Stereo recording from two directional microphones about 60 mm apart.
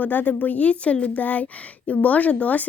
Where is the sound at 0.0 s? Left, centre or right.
Left.